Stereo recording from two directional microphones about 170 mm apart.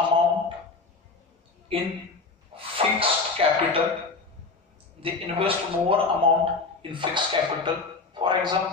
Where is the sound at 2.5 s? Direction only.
35° right (ahead or behind).